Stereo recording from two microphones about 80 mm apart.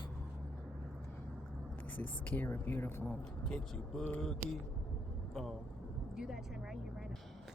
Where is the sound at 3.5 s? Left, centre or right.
Centre.